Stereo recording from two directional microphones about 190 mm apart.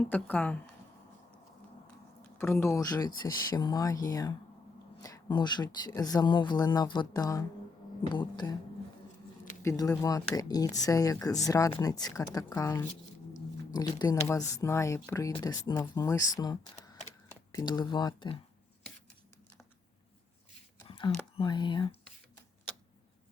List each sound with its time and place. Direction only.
0.0 s speech: 10° left (ahead or behind)
2.4 s speech: 15° left (ahead or behind)
9.6 s speech: 20° left (ahead or behind)
20.8 s a sound: 30° left (ahead or behind)
21.3 s speech: 25° left (ahead or behind)